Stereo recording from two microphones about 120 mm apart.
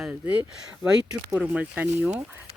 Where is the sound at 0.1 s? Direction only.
10° right (ahead or behind).